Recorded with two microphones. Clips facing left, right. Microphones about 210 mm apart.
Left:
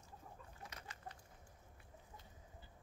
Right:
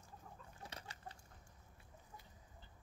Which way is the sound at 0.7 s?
30° right (ahead or behind).